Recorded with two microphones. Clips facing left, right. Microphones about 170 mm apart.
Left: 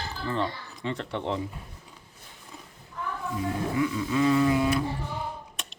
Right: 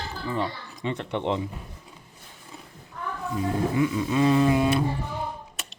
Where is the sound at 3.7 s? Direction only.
25° right (ahead or behind).